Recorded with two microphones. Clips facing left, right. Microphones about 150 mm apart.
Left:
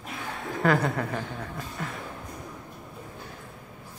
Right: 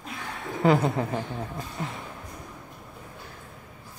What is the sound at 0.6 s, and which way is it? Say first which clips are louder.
A woman's voice: right 3 dB; 25° right (ahead or behind).